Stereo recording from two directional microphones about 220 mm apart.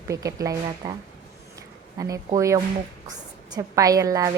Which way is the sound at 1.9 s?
15° right (ahead or behind).